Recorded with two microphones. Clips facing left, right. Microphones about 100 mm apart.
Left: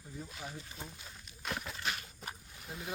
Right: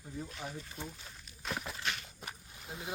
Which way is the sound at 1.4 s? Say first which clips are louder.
Right 1 dB; 5° right (ahead or behind).